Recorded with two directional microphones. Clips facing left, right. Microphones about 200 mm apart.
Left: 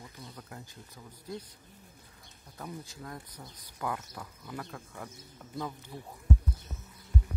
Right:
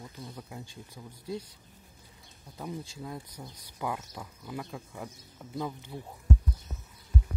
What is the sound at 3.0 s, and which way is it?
Speech, 10° right (ahead or behind).